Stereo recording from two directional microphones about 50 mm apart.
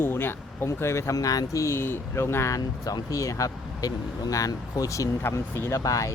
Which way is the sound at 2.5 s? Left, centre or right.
Left.